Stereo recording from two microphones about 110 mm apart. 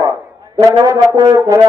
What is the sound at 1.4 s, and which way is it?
Speech, 30° right (ahead or behind).